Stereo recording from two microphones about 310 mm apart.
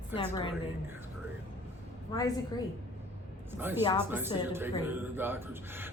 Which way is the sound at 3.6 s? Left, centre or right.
Centre.